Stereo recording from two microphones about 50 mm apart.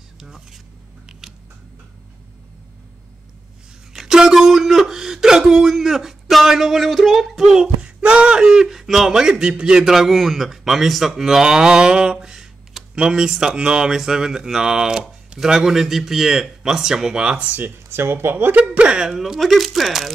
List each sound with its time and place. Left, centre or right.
0.2 s speech: centre
3.9 s speech: centre
7.8 s speech: right
17.5 s speech: right
18.8 s speech: centre